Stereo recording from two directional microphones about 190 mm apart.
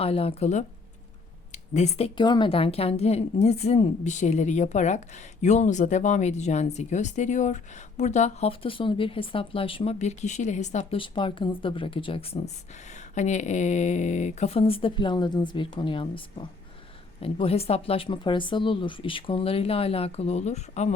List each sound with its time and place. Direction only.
0.0 s a woman's voice: 30° left (ahead or behind)
11.0 s speech: 25° left (ahead or behind)
12.9 s a woman's voice: 40° left (ahead or behind)